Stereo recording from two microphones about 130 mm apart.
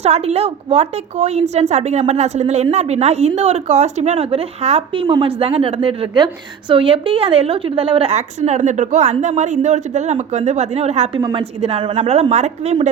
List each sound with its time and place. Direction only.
0.0 s speech: 55° right (ahead or behind)
5.0 s a woman's voice: 35° right (ahead or behind)
5.4 s a woman's voice: 50° right (ahead or behind)
8.1 s speech: 65° right (ahead or behind)
11.2 s a woman's voice: 30° right (ahead or behind)
11.6 s a woman's voice: 45° right (ahead or behind)
11.9 s speech: 55° right (ahead or behind)